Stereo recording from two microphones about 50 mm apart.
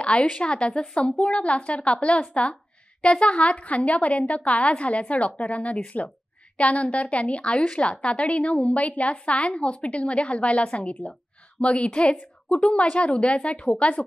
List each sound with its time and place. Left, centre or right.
0.0 s a woman's voice: left